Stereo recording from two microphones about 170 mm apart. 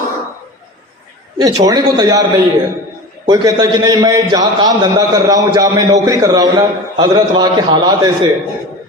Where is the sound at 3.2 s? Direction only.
25° right (ahead or behind).